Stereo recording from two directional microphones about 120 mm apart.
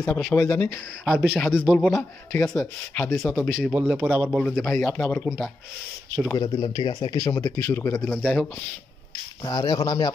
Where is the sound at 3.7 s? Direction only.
10° right (ahead or behind).